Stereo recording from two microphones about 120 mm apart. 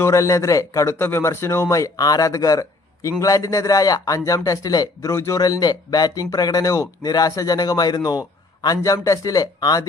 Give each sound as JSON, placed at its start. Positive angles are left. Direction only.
{"t": 0.0, "sound": "speech", "side_deg": 25}